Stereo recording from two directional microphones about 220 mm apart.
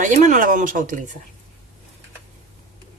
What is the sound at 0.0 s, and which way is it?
Speech, 35° right (ahead or behind).